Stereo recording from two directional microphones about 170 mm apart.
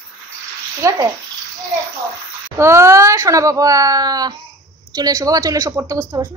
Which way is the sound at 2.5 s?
15° right (ahead or behind).